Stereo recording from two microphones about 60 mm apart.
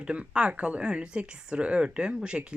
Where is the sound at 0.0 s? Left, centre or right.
Centre.